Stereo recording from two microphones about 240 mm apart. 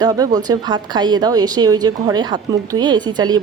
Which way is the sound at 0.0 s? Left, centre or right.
Centre.